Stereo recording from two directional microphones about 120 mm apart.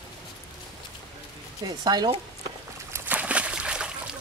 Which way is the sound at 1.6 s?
35° right (ahead or behind).